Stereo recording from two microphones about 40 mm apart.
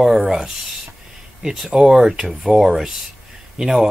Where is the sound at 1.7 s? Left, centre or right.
Centre.